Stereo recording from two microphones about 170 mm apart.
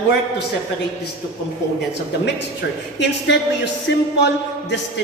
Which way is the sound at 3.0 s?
90° left.